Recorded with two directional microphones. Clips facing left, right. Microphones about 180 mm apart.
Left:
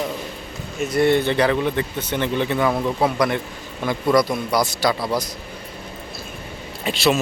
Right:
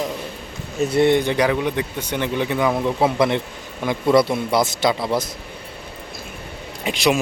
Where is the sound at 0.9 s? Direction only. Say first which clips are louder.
Right 1 dB; 20° right (ahead or behind).